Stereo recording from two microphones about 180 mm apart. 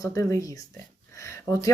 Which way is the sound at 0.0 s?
15° left (ahead or behind).